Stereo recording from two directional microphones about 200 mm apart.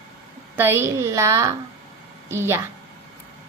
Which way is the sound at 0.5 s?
10° right (ahead or behind).